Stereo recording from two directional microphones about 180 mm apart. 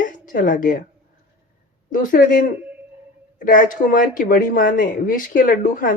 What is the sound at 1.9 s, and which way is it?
Speech, 50° left (ahead or behind).